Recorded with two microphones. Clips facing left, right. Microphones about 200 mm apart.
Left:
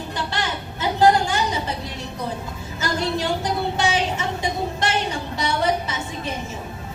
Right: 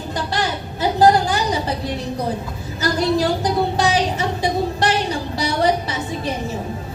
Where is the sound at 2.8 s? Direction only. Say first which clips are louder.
Right 6 dB; 35° right (ahead or behind).